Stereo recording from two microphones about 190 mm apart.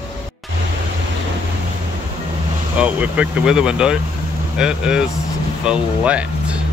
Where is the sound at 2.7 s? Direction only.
5° right (ahead or behind).